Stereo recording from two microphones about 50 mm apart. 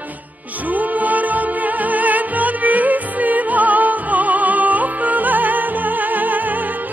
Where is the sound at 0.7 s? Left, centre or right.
Right.